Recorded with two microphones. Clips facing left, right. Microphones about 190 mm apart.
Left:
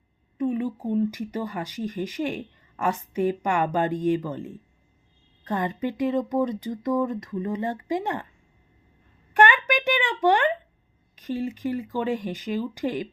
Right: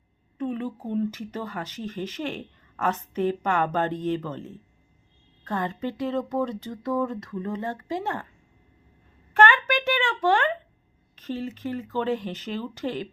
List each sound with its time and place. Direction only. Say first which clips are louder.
0.3 s speech: left 4 dB; 10° left (ahead or behind)
9.3 s a sound: even; 15° left (ahead or behind)
11.1 s speech: left 3 dB; 15° left (ahead or behind)